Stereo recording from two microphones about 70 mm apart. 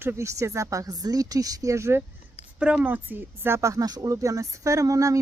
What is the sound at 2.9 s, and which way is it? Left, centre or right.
Speech, right.